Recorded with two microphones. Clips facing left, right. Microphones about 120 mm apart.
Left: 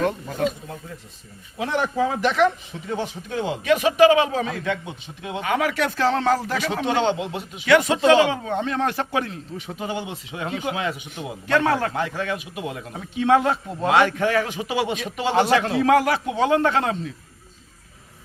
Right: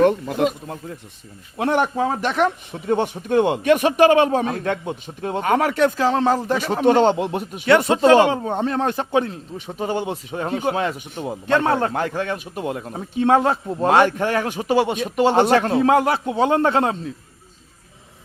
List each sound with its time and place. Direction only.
0.0 s speech: 70° right (ahead or behind)
1.5 s a man's voice: 55° right (ahead or behind)
6.0 s speech: 15° right (ahead or behind)
6.8 s a man's voice: 45° right (ahead or behind)
7.7 s speech: 30° right (ahead or behind)
8.1 s a man's voice: 45° right (ahead or behind)
8.4 s a man's voice: 30° right (ahead or behind)
8.9 s speech: 25° right (ahead or behind)
9.7 s a man's voice: 40° right (ahead or behind)
11.4 s speech: 25° right (ahead or behind)
11.9 s a man's voice: 45° right (ahead or behind)
12.9 s a man's voice: 35° right (ahead or behind)
14.2 s a man's voice: 45° right (ahead or behind)
15.8 s a man's voice: 25° right (ahead or behind)